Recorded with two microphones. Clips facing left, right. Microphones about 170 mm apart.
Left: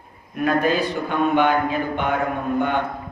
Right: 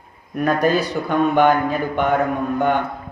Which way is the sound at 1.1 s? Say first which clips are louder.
Right 4 dB; 45° right (ahead or behind).